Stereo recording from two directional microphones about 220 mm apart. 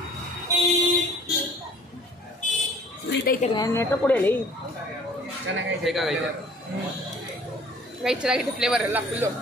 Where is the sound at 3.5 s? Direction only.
15° left (ahead or behind).